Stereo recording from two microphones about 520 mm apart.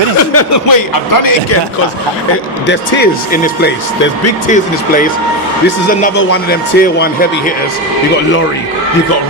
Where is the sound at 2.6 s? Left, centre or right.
Centre.